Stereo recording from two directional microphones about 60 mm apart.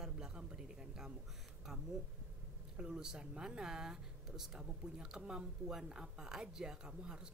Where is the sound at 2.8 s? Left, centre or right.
Centre.